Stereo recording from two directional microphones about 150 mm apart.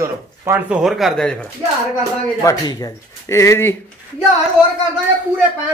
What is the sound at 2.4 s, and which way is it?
Speech, 25° left (ahead or behind).